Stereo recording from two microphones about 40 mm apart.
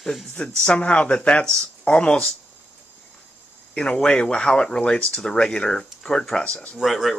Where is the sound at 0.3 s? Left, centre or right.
Left.